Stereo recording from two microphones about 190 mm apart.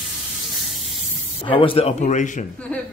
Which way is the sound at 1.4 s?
25° left (ahead or behind).